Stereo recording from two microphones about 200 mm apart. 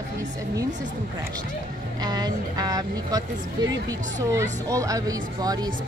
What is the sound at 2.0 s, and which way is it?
Speech, 20° right (ahead or behind).